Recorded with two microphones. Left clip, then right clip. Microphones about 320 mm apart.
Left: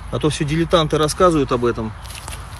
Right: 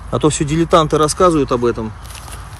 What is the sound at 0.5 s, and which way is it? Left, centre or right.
Speech, centre.